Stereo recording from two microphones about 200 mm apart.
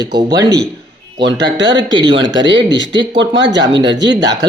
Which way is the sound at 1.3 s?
60° right (ahead or behind).